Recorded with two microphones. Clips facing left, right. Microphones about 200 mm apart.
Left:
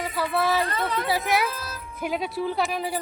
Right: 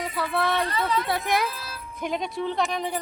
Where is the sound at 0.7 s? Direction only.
50° left (ahead or behind).